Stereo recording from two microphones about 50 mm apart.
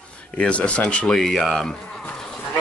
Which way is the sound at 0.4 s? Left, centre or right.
Left.